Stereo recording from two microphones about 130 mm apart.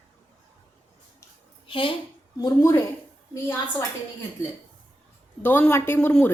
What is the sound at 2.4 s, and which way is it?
Speech, 25° left (ahead or behind).